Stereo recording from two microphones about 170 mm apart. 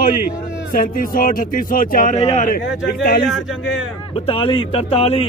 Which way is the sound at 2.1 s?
40° left (ahead or behind).